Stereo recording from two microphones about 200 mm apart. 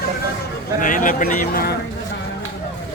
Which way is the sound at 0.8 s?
40° left (ahead or behind).